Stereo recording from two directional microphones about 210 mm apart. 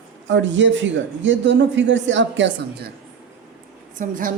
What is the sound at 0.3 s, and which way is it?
Speech, 60° right (ahead or behind).